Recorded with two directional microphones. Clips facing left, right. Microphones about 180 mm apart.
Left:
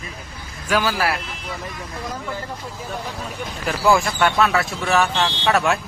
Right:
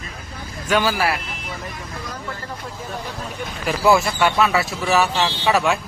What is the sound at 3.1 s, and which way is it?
Speech, 5° right (ahead or behind).